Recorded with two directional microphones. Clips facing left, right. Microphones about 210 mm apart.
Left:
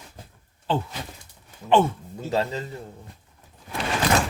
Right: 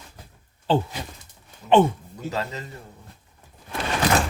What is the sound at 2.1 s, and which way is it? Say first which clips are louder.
Speech: left 4 dB; 30° left (ahead or behind).